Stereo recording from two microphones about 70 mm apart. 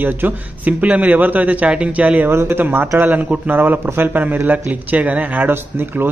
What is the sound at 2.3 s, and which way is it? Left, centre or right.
A man's voice, right.